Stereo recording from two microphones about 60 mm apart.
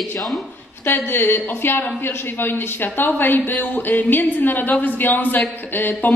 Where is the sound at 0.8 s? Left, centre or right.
Left.